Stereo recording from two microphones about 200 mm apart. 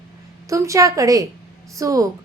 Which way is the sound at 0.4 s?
15° right (ahead or behind).